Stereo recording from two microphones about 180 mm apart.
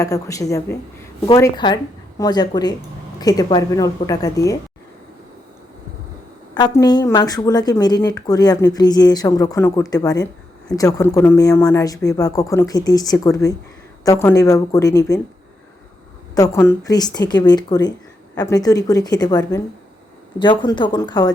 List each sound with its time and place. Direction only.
0.0 s a woman's voice: 20° left (ahead or behind)
6.5 s speech: 20° left (ahead or behind)
16.3 s speech: 15° left (ahead or behind)